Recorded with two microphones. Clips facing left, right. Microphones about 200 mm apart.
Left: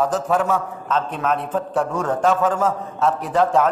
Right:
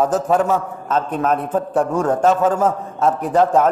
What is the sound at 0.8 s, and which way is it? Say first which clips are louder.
A man's voice: right 4 dB; 45° right (ahead or behind).